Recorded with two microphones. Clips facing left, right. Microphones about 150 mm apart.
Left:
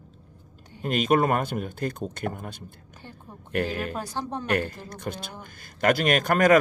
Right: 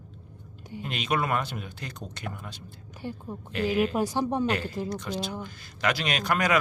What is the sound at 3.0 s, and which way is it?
Speech, 15° right (ahead or behind).